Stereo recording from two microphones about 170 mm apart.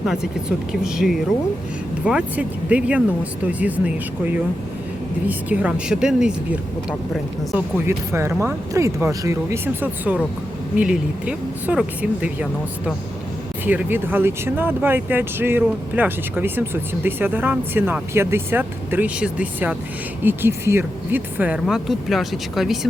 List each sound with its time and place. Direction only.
0.1 s speech: 5° right (ahead or behind)
5.3 s speech: 10° right (ahead or behind)
7.5 s speech: 15° right (ahead or behind)